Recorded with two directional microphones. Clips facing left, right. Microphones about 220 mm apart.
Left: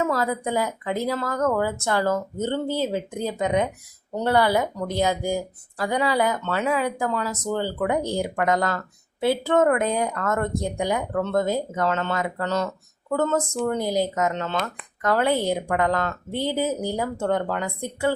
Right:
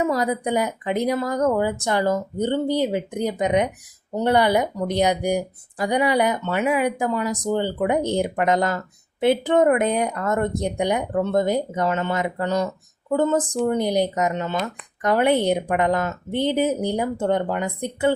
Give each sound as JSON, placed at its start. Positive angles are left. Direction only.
{"t": 0.0, "sound": "speech", "side_deg": -15}